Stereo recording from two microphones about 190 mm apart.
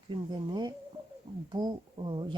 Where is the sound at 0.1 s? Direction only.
25° right (ahead or behind).